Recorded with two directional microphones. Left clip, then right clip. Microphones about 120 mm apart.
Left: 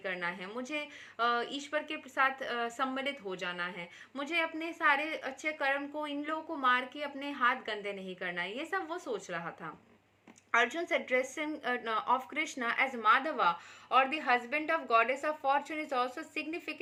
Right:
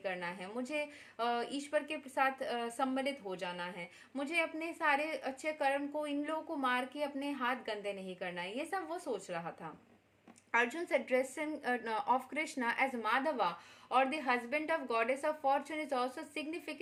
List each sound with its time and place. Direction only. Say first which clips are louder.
0.0 s a woman's voice: left 3 dB; 20° right (ahead or behind)
10.6 s a woman's voice: left 2 dB; 20° right (ahead or behind)